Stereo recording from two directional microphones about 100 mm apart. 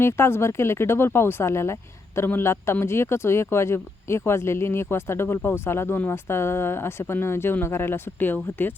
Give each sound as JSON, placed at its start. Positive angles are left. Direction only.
{"t": 0.0, "sound": "speech", "side_deg": 25}